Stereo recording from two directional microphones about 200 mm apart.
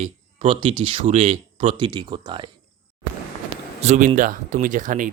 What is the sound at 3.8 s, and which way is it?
A man's voice, 35° right (ahead or behind).